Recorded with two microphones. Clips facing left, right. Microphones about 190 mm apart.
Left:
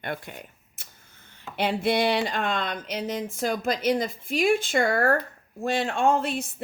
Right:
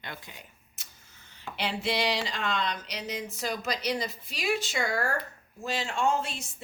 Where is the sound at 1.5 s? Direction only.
55° left (ahead or behind).